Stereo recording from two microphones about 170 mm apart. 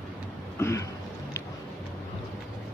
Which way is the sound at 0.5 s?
15° left (ahead or behind).